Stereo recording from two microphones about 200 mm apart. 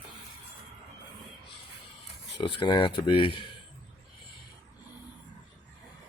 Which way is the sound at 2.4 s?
25° left (ahead or behind).